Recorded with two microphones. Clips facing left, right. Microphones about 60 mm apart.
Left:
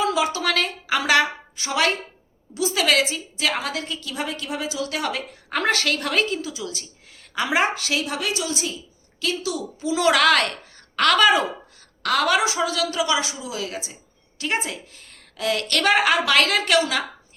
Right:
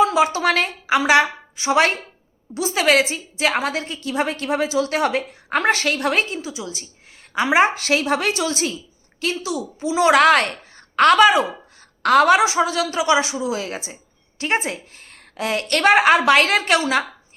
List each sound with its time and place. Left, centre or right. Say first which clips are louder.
0.0 s a woman's voice: right 5 dB; right
0.9 s a woman's voice: right 4 dB; centre
1.7 s a woman's voice: right 5 dB; right
7.9 s a woman's voice: right 6 dB; right
9.2 s a woman's voice: right 2 dB; right
12.0 s a woman's voice: right 6 dB; right
13.4 s a woman's voice: right 5 dB; right